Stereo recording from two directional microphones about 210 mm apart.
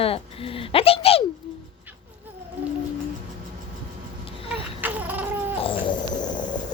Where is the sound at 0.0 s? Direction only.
25° left (ahead or behind).